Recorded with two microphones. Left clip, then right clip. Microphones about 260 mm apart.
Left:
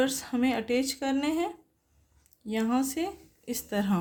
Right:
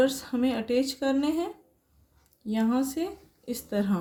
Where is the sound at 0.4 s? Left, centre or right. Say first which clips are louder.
Even; left.